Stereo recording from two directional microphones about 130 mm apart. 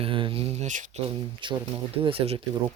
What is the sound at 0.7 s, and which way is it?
Speech, 75° right (ahead or behind).